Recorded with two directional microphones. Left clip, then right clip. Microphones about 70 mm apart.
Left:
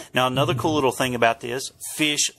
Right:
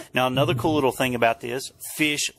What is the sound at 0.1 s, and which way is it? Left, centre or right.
Speech, right.